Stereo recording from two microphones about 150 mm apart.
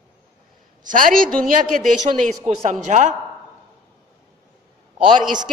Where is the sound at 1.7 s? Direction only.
55° right (ahead or behind).